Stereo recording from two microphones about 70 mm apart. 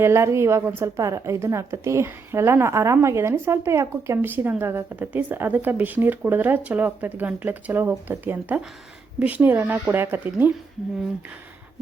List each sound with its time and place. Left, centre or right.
0.0 s a woman's voice: right
4.9 s speech: right